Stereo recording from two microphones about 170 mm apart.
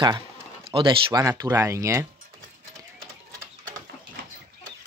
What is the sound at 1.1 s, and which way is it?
Speech, 20° right (ahead or behind).